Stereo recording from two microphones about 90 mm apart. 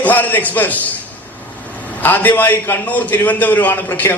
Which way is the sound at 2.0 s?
20° left (ahead or behind).